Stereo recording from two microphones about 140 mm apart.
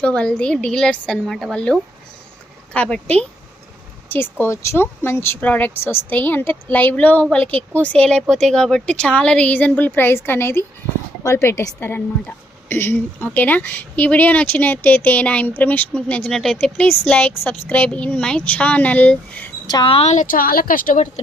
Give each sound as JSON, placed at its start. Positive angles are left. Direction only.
{"t": 0.0, "sound": "speech", "side_deg": 10}
{"t": 2.7, "sound": "speech", "side_deg": 10}
{"t": 19.6, "sound": "speech", "side_deg": 35}
{"t": 20.1, "sound": "a woman's voice", "side_deg": 75}